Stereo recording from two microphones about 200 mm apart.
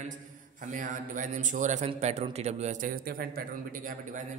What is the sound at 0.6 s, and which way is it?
A man's voice, 40° right (ahead or behind).